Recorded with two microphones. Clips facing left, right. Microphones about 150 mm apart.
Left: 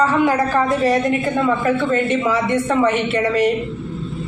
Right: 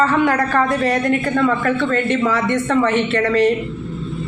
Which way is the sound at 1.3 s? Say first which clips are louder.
Even; 15° left (ahead or behind).